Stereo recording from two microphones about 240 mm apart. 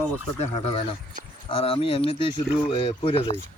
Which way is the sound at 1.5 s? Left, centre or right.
Left.